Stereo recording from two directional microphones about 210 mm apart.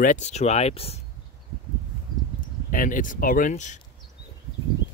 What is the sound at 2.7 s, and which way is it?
Speech, 40° left (ahead or behind).